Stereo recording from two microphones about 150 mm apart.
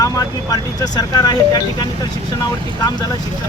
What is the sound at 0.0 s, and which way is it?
Speech, 25° left (ahead or behind).